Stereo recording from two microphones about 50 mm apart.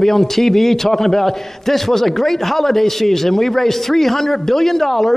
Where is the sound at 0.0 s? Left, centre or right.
Centre.